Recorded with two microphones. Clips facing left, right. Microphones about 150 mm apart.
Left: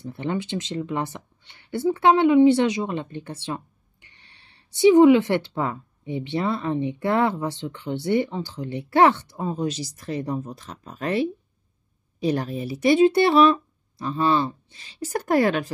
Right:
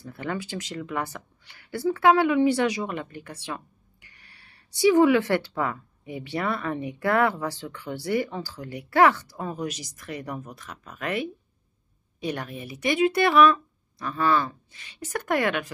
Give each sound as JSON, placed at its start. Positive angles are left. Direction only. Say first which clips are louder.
{"t": 0.0, "sound": "speech", "louder": "left 4 dB", "side_deg": 25}